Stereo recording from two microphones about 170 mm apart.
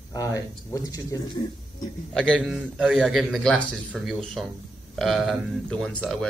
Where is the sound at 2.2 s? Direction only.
5° left (ahead or behind).